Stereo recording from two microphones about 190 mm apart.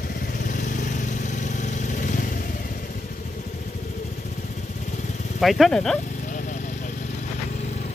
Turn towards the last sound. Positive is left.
turn(degrees=5)  # may be behind; listen again after turning